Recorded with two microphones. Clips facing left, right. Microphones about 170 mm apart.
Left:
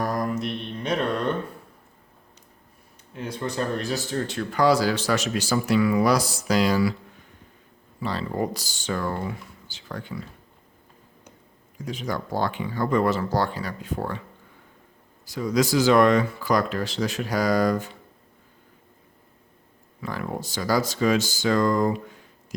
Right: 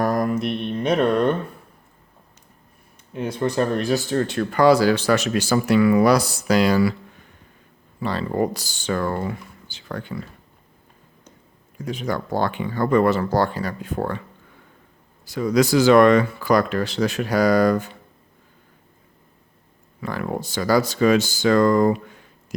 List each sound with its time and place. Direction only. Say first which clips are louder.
0.0 s mantra: right 5 dB; 65° right (ahead or behind)
3.2 s speech: right 7 dB; 60° right (ahead or behind)
8.0 s speech: right 4 dB; 60° right (ahead or behind)
11.8 s speech: right 4 dB; 60° right (ahead or behind)
15.2 s speech: right 4 dB; 65° right (ahead or behind)
20.0 s speech: right 4 dB; 60° right (ahead or behind)